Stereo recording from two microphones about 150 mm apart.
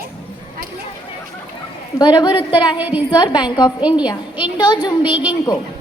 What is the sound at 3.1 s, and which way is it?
A woman's voice, 30° left (ahead or behind).